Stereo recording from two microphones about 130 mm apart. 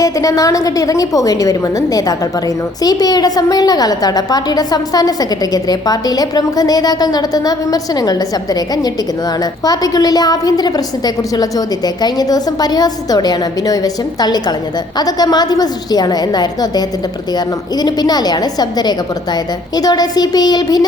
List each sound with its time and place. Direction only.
0.0 s a woman's voice: 25° left (ahead or behind)